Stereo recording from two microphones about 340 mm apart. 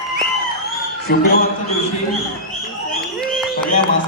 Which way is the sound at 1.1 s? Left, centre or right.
Left.